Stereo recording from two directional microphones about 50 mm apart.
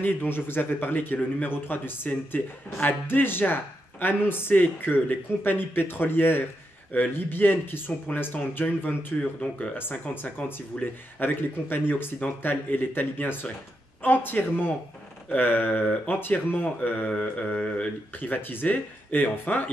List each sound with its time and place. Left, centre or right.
0.0 s a man's voice: left
17.1 s mantra: left
18.1 s speech: left